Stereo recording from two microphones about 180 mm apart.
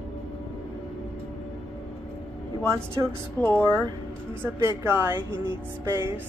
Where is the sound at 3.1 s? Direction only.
10° left (ahead or behind).